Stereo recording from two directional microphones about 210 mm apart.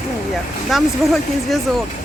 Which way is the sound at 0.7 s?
Centre (ahead or behind).